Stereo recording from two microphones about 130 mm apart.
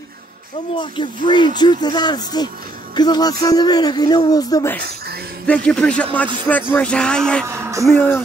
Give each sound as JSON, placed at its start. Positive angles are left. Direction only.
{"t": 0.7, "sound": "speech", "side_deg": 40}
{"t": 5.5, "sound": "speech", "side_deg": 10}
{"t": 7.4, "sound": "speech", "side_deg": -20}
{"t": 7.8, "sound": "speech", "side_deg": 15}